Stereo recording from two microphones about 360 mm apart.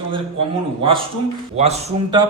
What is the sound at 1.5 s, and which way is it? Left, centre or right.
Speech, centre.